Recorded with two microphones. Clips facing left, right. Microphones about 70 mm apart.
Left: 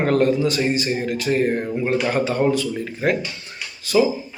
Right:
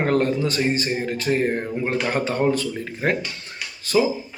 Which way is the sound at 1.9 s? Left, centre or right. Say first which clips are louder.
Left 3 dB; right.